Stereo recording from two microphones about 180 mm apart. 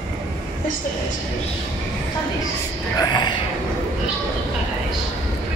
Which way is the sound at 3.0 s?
25° left (ahead or behind).